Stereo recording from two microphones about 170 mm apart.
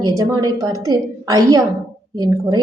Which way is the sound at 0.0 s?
20° right (ahead or behind).